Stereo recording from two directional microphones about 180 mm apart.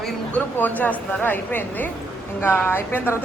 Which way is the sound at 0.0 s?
10° left (ahead or behind).